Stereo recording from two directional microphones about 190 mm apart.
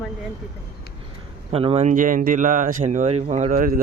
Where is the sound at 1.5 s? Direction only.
30° right (ahead or behind).